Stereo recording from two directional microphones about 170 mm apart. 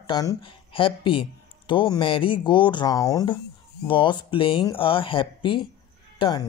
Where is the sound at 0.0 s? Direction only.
25° left (ahead or behind).